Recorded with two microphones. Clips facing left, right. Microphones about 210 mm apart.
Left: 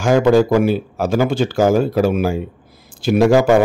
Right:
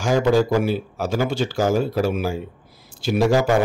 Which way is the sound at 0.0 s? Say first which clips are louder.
Left 5 dB; 55° left (ahead or behind).